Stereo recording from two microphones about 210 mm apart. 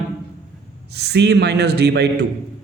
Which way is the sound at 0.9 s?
50° right (ahead or behind).